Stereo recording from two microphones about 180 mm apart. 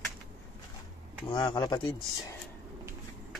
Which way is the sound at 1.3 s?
25° left (ahead or behind).